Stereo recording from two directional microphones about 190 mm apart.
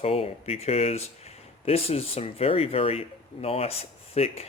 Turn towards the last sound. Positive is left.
turn(degrees=30)  # may be behind; listen again after turning